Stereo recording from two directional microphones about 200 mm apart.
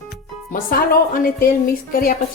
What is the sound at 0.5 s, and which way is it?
Speech, 45° left (ahead or behind).